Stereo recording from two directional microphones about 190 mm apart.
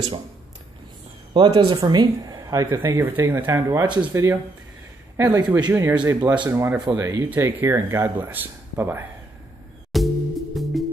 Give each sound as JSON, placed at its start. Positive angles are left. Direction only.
{"t": 1.3, "sound": "speech", "side_deg": -25}
{"t": 9.9, "sound": "music", "side_deg": 0}